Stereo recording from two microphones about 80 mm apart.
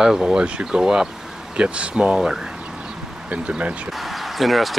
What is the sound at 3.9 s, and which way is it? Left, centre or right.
Basketball bounce, centre.